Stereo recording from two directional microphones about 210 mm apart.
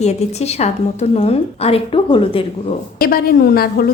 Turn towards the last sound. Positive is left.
turn(degrees=45)  # may be behind; listen again after turning